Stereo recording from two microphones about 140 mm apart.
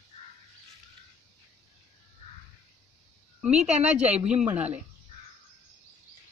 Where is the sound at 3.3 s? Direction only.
5° right (ahead or behind).